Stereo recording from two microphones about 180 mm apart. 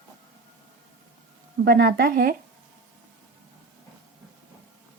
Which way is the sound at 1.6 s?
60° right (ahead or behind).